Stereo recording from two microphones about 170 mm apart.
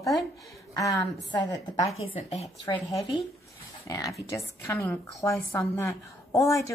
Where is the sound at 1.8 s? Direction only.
35° left (ahead or behind).